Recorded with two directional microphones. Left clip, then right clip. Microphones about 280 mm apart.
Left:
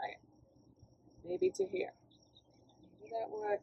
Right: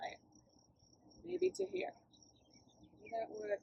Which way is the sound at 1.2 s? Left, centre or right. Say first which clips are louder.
Left 3 dB; centre.